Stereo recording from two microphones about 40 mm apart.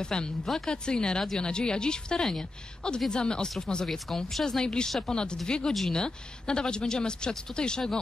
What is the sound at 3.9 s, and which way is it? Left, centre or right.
A woman's voice, centre.